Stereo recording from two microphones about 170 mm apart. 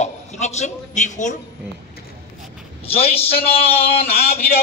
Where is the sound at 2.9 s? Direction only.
35° left (ahead or behind).